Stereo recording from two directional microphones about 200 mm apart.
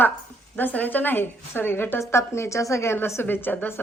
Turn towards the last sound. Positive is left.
turn(degrees=10)  # may be behind; listen again after turning